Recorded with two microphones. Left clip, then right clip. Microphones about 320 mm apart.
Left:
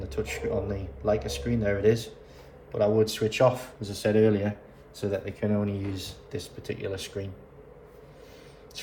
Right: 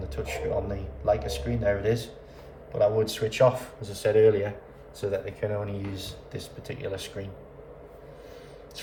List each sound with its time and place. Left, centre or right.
0.0 s speech: left